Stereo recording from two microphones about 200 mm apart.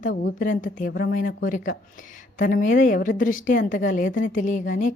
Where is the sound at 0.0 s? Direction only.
45° left (ahead or behind).